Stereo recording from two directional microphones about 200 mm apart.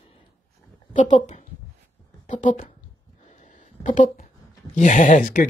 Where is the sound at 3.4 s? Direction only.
40° left (ahead or behind).